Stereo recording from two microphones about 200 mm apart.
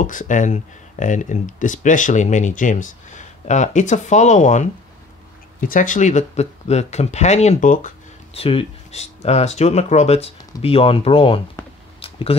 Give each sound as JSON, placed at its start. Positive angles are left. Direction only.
{"t": 0.0, "sound": "speech", "side_deg": 40}
{"t": 8.4, "sound": "speech", "side_deg": 30}
{"t": 12.0, "sound": "a sound", "side_deg": 25}